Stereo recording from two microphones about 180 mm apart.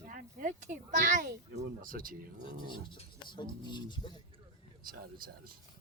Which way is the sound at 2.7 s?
25° left (ahead or behind).